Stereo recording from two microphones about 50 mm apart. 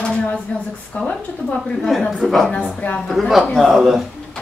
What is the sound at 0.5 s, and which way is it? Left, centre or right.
Speech, left.